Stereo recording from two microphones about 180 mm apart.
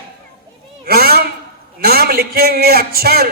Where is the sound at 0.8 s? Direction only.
60° right (ahead or behind).